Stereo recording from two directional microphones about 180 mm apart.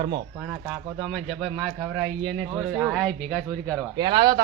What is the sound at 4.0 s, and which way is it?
Speech, 25° right (ahead or behind).